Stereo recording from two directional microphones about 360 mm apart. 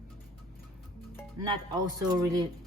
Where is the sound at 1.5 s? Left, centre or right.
Centre.